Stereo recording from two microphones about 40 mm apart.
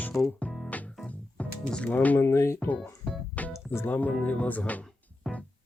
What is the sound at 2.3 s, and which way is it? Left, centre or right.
Speech, left.